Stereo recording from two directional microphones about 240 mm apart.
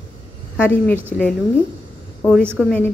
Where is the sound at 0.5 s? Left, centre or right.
Centre.